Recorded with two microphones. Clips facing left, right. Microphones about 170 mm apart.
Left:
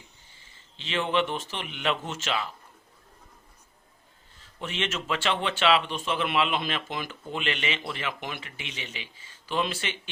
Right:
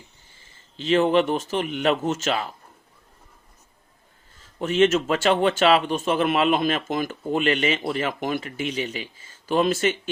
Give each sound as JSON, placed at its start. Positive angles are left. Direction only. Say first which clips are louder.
{"t": 0.8, "sound": "speech", "louder": "right 8 dB", "side_deg": -40}
{"t": 4.6, "sound": "speech", "louder": "right 13 dB", "side_deg": -40}